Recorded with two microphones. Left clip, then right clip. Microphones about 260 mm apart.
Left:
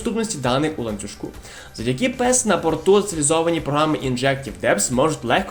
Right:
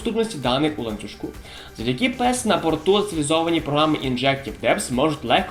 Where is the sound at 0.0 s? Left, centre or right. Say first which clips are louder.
Even; left.